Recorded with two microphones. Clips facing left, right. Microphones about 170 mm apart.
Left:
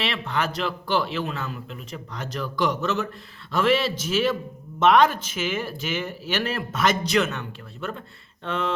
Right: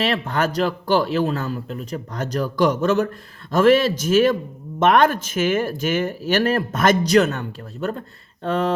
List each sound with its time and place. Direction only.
0.0 s speech: 45° right (ahead or behind)